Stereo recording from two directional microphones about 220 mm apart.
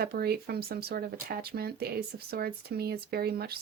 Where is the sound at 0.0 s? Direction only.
45° right (ahead or behind).